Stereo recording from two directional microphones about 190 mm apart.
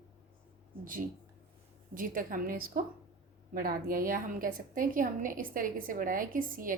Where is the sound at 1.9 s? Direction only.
45° right (ahead or behind).